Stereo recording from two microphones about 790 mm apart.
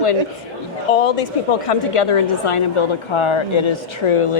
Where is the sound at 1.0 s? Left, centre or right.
Left.